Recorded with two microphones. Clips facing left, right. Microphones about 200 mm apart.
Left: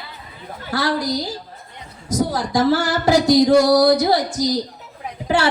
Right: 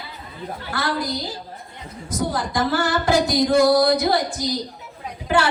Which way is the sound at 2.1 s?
55° right (ahead or behind).